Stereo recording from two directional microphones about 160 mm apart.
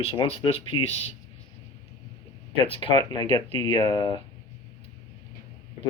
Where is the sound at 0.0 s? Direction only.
35° left (ahead or behind).